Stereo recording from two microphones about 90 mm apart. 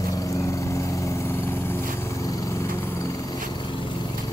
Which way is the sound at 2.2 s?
40° left (ahead or behind).